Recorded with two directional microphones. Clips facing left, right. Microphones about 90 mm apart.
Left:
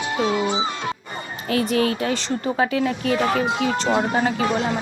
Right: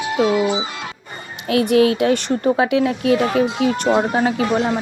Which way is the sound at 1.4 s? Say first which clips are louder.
Right 6 dB; 70° right (ahead or behind).